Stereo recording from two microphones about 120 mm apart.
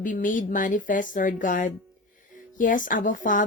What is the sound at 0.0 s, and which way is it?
Speech, 90° left.